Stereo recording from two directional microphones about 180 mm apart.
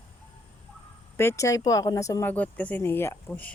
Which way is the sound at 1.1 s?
15° left (ahead or behind).